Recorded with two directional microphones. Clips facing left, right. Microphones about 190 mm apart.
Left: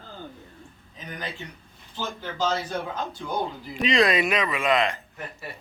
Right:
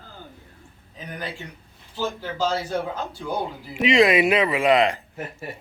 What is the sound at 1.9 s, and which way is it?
Speech, 10° right (ahead or behind).